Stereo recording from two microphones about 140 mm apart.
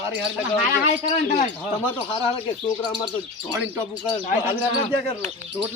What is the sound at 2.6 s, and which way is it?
Speech, 35° left (ahead or behind).